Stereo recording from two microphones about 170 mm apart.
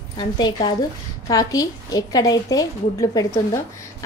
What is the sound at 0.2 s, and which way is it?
A woman's voice, 25° left (ahead or behind).